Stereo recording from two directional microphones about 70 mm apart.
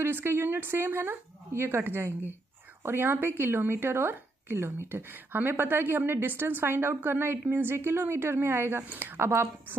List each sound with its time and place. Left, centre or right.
0.0 s a woman's voice: right